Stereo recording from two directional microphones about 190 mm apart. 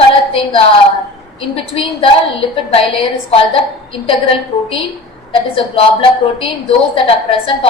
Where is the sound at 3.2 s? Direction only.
30° left (ahead or behind).